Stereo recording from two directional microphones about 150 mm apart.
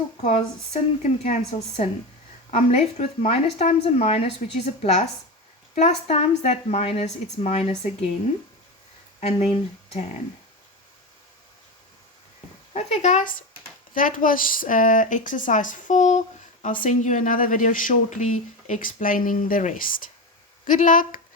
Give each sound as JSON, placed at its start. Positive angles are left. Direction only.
{"t": 0.3, "sound": "speech", "side_deg": 50}
{"t": 9.2, "sound": "speech", "side_deg": 45}
{"t": 12.7, "sound": "speech", "side_deg": 50}
{"t": 13.9, "sound": "speech", "side_deg": 65}